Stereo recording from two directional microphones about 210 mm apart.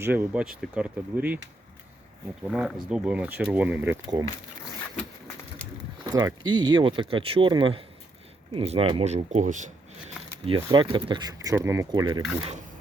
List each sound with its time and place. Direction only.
0.0 s speech: 10° right (ahead or behind)
2.4 s speech: 5° right (ahead or behind)
4.2 s speech: 20° right (ahead or behind)
6.1 s speech: 15° right (ahead or behind); by 9.7 s 35° right (ahead or behind)
10.4 s speech: 25° right (ahead or behind)